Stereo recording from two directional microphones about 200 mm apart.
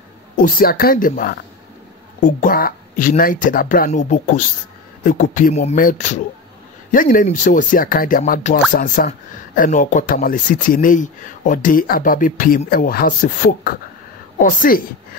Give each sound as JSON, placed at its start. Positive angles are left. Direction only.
{"t": 0.4, "sound": "speech", "side_deg": 45}
{"t": 5.0, "sound": "speech", "side_deg": 40}